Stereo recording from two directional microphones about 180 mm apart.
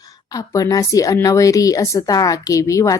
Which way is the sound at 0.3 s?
20° left (ahead or behind).